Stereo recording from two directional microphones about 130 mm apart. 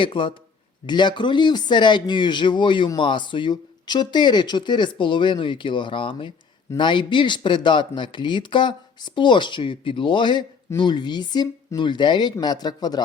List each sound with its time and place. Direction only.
0.0 s speech: 40° left (ahead or behind)